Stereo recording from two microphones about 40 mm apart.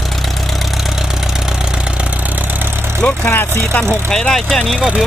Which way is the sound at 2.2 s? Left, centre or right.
Right.